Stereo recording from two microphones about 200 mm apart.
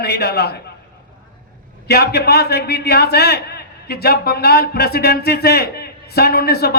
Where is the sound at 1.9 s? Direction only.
55° left (ahead or behind).